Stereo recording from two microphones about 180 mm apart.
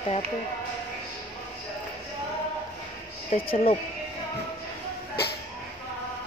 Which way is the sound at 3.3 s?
45° left (ahead or behind).